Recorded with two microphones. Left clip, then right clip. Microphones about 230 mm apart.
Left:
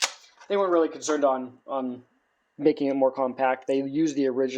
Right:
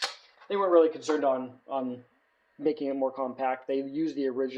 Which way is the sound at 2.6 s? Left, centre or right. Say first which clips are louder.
Left 6 dB; left.